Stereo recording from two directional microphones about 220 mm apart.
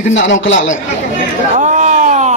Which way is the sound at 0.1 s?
55° left (ahead or behind).